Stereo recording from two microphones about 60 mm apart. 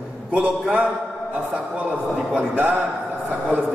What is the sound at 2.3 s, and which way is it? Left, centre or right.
A man's voice, right.